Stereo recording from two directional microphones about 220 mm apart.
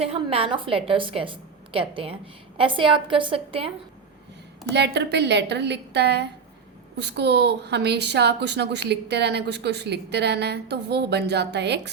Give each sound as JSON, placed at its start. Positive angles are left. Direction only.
{"t": 0.0, "sound": "a woman's voice", "side_deg": -25}
{"t": 4.7, "sound": "a woman's voice", "side_deg": -50}